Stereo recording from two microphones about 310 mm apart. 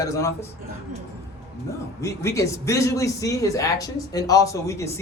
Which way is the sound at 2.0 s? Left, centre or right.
Centre.